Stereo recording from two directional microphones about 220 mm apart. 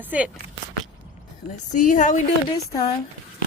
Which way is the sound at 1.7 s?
35° left (ahead or behind).